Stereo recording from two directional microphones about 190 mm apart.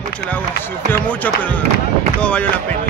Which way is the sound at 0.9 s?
10° left (ahead or behind).